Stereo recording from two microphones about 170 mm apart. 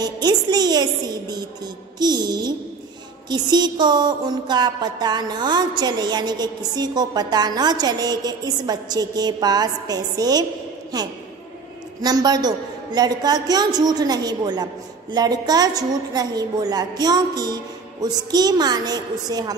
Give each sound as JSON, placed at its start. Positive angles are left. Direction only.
{"t": 0.0, "sound": "a woman's voice", "side_deg": -25}
{"t": 2.0, "sound": "music", "side_deg": -25}
{"t": 3.3, "sound": "a woman's voice", "side_deg": -25}
{"t": 12.0, "sound": "a woman's voice", "side_deg": -25}